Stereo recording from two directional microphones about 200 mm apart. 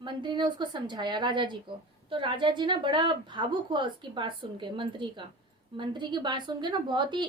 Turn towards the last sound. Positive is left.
turn(degrees=-25)  # may be behind; listen again after turning